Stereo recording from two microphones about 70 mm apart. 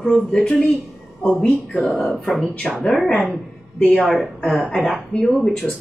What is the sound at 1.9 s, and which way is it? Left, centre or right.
Speech, centre.